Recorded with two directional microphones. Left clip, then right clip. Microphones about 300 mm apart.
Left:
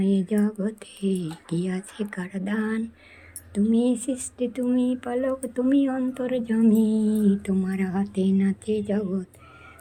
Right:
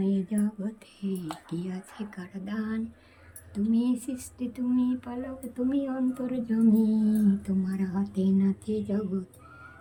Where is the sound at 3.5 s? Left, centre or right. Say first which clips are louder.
Left 5 dB; centre.